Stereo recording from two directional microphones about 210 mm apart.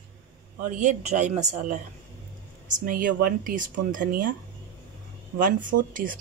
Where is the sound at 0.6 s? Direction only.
35° right (ahead or behind).